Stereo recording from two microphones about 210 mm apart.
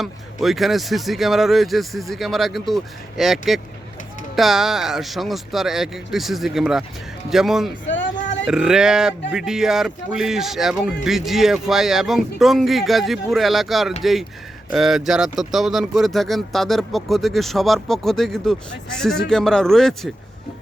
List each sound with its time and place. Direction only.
0.0 s speech: centre (ahead or behind)
7.9 s a sound: 60° left (ahead or behind)
8.4 s speech: 5° right (ahead or behind)